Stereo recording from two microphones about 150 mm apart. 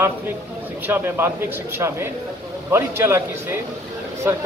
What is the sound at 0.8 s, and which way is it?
Speech, 15° right (ahead or behind).